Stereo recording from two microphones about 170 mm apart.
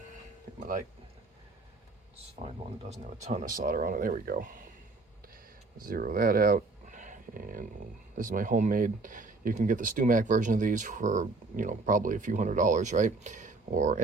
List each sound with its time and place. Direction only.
2.9 s speech: 40° right (ahead or behind)
5.8 s speech: 55° right (ahead or behind)